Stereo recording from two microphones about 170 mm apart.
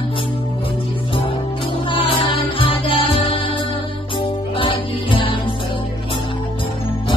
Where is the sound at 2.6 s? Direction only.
30° left (ahead or behind).